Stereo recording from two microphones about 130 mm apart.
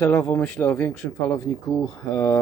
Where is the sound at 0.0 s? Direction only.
25° left (ahead or behind).